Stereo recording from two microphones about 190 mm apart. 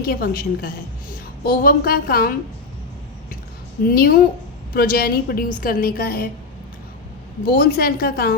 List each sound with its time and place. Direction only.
0.0 s a woman's voice: 50° left (ahead or behind)
3.8 s a woman's voice: 50° left (ahead or behind)
7.4 s a woman's voice: 55° left (ahead or behind)